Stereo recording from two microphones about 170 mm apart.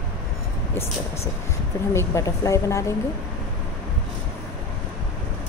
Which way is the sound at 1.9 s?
20° left (ahead or behind).